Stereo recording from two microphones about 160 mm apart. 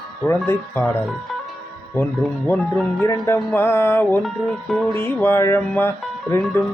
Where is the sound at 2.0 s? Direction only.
10° left (ahead or behind).